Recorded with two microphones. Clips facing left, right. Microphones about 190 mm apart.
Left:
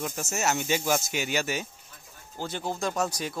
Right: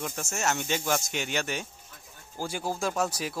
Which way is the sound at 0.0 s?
5° left (ahead or behind).